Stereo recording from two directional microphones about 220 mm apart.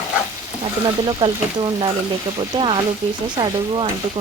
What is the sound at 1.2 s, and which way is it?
Speech, 20° right (ahead or behind).